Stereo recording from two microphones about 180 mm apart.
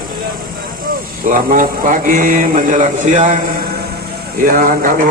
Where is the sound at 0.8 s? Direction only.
50° right (ahead or behind).